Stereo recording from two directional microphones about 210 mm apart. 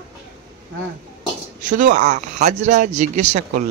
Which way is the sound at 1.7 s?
35° right (ahead or behind).